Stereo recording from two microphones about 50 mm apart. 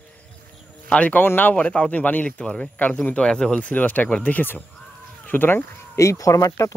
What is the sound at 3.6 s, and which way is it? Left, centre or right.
Speech, left.